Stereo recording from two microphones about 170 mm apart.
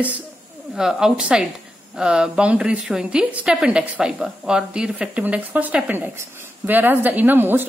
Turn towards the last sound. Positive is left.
turn(degrees=-10)  # may be behind; listen again after turning